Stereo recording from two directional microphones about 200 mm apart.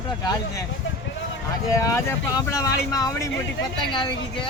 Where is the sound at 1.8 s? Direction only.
15° left (ahead or behind).